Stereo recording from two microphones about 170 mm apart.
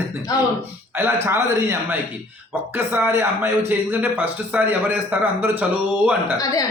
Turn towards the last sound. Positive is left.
turn(degrees=20)  # may be behind; listen again after turning